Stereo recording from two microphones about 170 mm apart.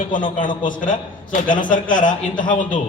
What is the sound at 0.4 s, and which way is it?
A man's voice, 50° left (ahead or behind).